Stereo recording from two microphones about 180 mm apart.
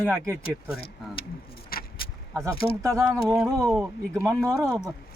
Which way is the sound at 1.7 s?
55° left (ahead or behind).